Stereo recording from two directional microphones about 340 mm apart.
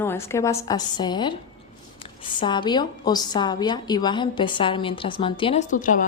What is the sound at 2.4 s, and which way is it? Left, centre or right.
A woman's voice, centre.